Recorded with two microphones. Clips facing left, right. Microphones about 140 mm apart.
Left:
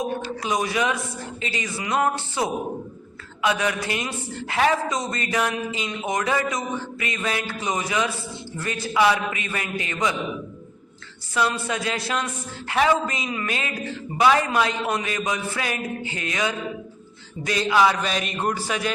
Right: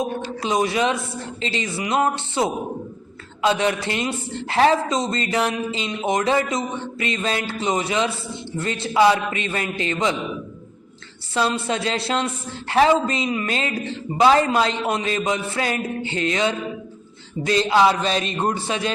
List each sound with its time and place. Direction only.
0.4 s a man's voice: 25° right (ahead or behind)
11.3 s a man's voice: 25° right (ahead or behind)